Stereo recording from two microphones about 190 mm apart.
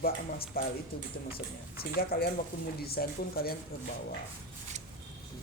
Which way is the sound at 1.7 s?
55° left (ahead or behind).